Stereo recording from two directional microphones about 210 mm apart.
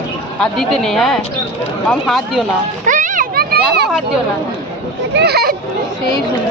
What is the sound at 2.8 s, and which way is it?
Children playing, 40° right (ahead or behind).